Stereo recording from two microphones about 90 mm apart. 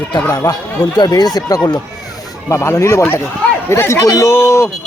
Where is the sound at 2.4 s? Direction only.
35° left (ahead or behind).